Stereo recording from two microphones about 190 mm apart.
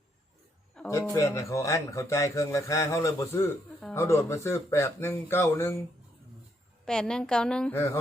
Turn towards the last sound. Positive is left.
turn(degrees=10)  # may be behind; listen again after turning